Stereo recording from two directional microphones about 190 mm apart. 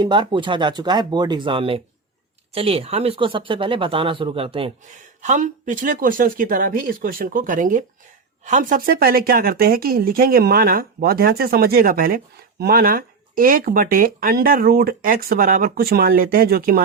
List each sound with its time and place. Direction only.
0.0 s speech: 25° right (ahead or behind)
5.2 s a woman's voice: 40° right (ahead or behind)